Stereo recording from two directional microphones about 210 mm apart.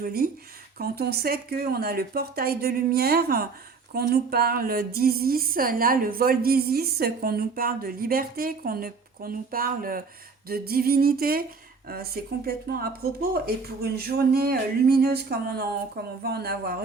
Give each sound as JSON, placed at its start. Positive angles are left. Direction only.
{"t": 0.0, "sound": "speech", "side_deg": -45}